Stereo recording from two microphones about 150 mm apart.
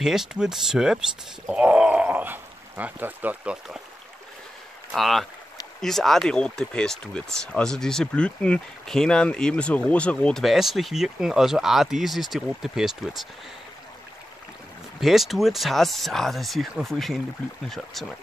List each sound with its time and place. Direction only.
0.0 s speech: 5° right (ahead or behind)
1.5 s a sound: 5° right (ahead or behind)
4.9 s speech: centre (ahead or behind)
15.0 s speech: centre (ahead or behind)